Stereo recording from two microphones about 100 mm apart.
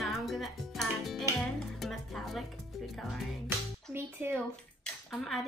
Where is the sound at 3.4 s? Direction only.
20° right (ahead or behind).